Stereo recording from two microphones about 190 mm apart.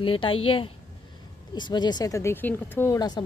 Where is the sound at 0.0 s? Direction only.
25° left (ahead or behind).